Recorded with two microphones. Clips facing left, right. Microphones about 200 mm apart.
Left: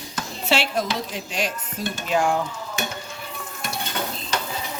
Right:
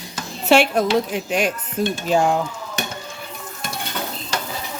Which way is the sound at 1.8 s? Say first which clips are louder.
Right 8 dB; 55° right (ahead or behind).